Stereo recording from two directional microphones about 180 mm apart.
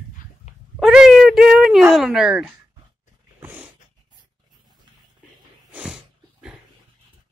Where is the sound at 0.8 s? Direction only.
5° right (ahead or behind).